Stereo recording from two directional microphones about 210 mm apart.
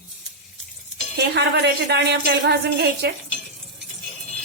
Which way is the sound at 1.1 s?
55° right (ahead or behind).